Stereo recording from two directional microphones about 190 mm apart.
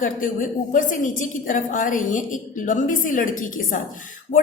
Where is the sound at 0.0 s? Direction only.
45° left (ahead or behind).